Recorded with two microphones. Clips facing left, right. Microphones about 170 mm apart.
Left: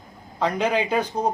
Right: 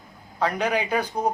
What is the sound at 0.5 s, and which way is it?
Speech, 20° left (ahead or behind).